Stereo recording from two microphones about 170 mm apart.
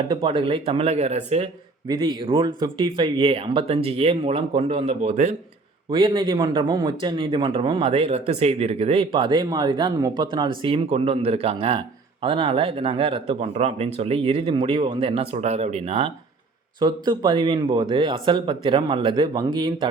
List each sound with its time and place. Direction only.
0.1 s speech: 25° right (ahead or behind)
1.9 s speech: 25° right (ahead or behind); by 5.3 s 45° right (ahead or behind)
5.9 s speech: 30° right (ahead or behind)